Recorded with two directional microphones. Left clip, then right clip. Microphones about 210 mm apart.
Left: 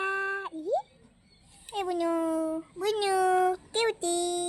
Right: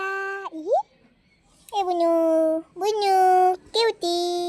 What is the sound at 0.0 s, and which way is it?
Plop, 20° right (ahead or behind).